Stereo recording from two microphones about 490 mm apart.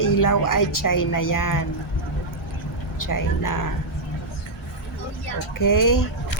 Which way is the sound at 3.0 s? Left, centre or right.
Left.